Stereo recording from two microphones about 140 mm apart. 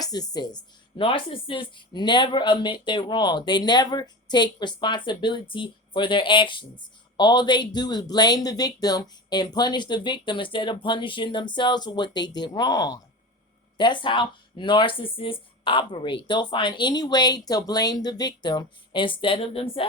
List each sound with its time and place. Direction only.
0.0 s speech: 25° left (ahead or behind)